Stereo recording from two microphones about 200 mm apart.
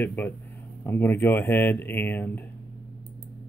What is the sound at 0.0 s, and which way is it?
Speech, 10° left (ahead or behind).